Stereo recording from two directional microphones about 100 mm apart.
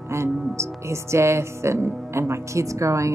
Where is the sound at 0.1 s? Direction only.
30° right (ahead or behind).